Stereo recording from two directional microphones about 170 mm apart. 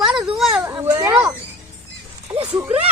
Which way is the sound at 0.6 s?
15° right (ahead or behind).